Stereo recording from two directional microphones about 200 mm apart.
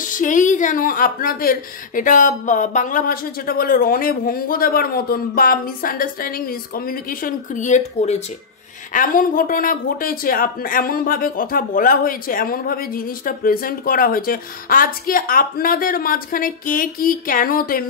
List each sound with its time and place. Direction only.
0.0 s speech: 40° left (ahead or behind)